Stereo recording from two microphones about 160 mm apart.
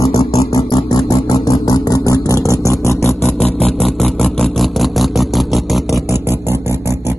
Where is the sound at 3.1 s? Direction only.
Centre (ahead or behind).